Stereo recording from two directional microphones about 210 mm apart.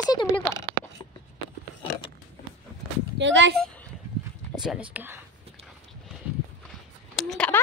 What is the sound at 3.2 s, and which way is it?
Speech, 60° right (ahead or behind).